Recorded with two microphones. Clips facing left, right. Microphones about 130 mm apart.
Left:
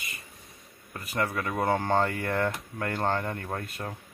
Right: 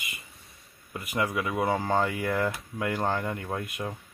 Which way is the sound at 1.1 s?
5° right (ahead or behind).